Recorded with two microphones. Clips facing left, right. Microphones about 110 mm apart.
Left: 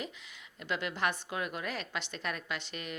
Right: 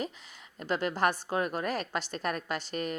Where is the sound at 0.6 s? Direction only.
40° right (ahead or behind).